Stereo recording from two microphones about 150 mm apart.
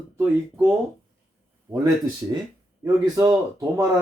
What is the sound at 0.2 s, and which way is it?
Speech, 15° right (ahead or behind).